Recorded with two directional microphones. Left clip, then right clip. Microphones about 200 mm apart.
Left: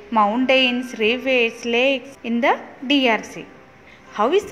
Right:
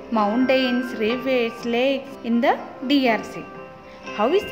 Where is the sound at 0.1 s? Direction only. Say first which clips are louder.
Left 3 dB; 10° right (ahead or behind).